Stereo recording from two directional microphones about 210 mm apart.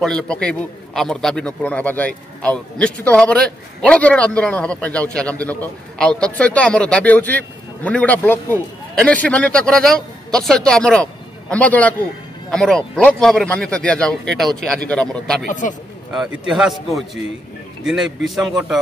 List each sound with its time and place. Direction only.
0.0 s a man's voice: 5° left (ahead or behind)
15.4 s speech: 35° left (ahead or behind)
16.1 s a man's voice: centre (ahead or behind)